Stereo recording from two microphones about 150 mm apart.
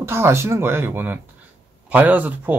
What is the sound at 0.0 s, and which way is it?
Speech, 15° right (ahead or behind).